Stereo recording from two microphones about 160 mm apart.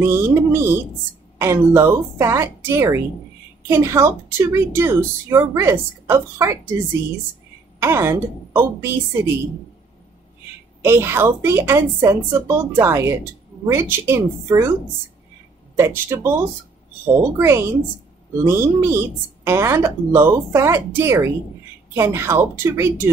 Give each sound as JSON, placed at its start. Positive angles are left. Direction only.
{"t": 0.0, "sound": "a woman's voice", "side_deg": -15}
{"t": 7.8, "sound": "a woman's voice", "side_deg": -15}
{"t": 10.8, "sound": "a woman's voice", "side_deg": -15}
{"t": 15.7, "sound": "a woman's voice", "side_deg": -15}